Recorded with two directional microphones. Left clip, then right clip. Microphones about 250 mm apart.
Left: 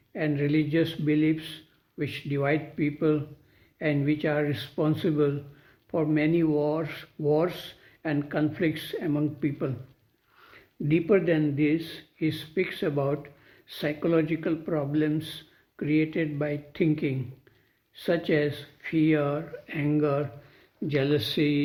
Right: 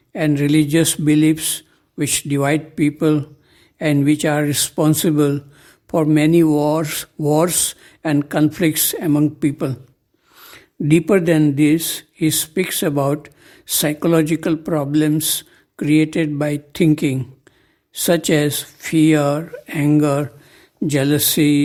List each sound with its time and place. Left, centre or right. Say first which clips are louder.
0.1 s speech: right 10 dB; right